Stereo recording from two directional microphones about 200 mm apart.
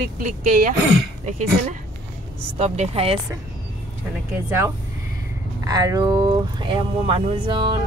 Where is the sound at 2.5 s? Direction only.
35° right (ahead or behind).